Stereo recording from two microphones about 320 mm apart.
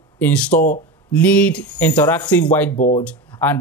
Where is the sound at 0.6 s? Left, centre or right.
Left.